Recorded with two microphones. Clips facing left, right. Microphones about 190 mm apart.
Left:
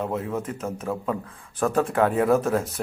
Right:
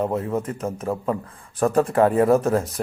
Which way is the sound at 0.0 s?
Centre (ahead or behind).